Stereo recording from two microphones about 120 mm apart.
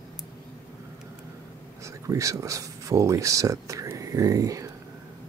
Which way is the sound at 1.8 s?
25° right (ahead or behind).